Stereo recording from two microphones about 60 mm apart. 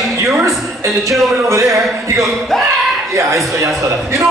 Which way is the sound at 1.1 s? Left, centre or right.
Right.